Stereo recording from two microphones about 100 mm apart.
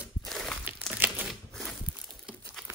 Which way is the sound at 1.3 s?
5° left (ahead or behind).